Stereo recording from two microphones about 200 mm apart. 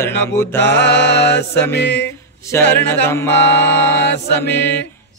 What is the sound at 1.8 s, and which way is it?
Mantra, 60° left (ahead or behind).